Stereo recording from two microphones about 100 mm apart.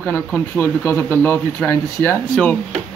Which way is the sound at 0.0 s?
20° left (ahead or behind).